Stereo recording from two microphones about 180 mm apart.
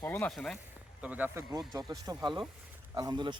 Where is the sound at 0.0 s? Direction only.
10° left (ahead or behind).